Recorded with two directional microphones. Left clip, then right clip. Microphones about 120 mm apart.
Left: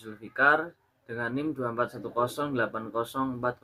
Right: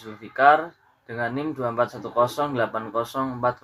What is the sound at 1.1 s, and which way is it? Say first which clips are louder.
Speech: right 4 dB; 35° left (ahead or behind).